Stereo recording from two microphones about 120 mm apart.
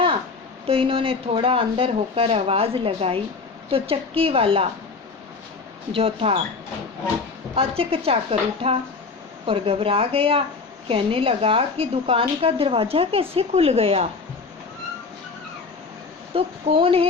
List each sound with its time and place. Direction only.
0.7 s a woman's voice: 50° right (ahead or behind)
5.9 s a woman's voice: 50° right (ahead or behind)
7.5 s a woman's voice: 55° right (ahead or behind)
16.3 s a woman's voice: 50° right (ahead or behind)